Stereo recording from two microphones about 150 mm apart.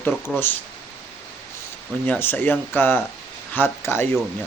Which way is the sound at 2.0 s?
15° left (ahead or behind).